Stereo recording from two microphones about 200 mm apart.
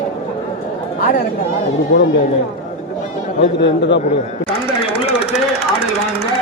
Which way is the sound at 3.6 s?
60° left (ahead or behind).